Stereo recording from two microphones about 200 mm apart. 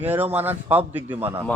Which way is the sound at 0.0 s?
10° right (ahead or behind).